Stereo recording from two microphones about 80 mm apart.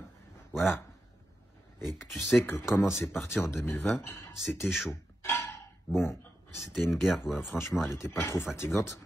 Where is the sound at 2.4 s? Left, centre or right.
Left.